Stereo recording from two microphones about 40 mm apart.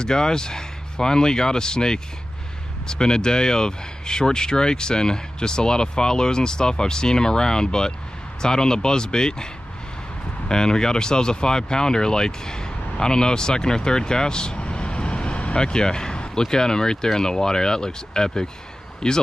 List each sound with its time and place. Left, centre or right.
0.0 s speech: centre
10.5 s speech: centre
15.6 s speech: centre